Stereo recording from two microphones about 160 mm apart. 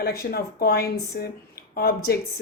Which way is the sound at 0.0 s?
75° left (ahead or behind).